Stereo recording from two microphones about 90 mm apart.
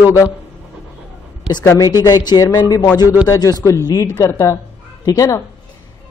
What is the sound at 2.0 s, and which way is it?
A man's voice, 50° left (ahead or behind).